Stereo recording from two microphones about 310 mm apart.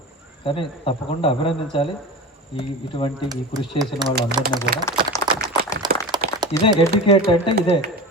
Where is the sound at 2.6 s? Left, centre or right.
Centre.